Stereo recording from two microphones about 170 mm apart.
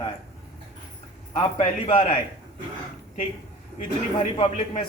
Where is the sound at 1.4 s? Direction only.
30° left (ahead or behind).